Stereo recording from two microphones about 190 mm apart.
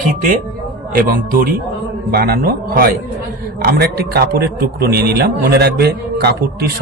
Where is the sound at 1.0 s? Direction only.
50° right (ahead or behind).